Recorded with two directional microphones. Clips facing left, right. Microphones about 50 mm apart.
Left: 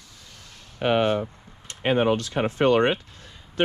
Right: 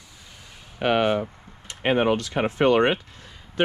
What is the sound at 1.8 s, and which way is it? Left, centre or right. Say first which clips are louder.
Speech: even; right.